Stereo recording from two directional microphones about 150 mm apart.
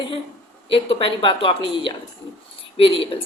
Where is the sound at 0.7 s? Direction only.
40° left (ahead or behind).